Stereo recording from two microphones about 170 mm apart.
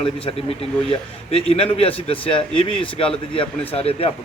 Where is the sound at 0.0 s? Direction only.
35° left (ahead or behind).